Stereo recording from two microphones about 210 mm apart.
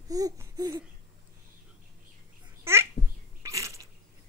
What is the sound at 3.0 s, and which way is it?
Babbling, 45° left (ahead or behind).